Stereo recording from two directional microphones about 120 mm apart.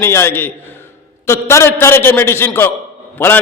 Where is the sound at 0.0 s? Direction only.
20° left (ahead or behind).